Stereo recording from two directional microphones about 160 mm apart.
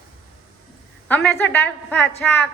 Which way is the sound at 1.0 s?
10° left (ahead or behind).